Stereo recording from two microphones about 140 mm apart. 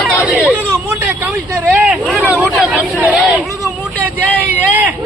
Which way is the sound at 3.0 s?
10° right (ahead or behind).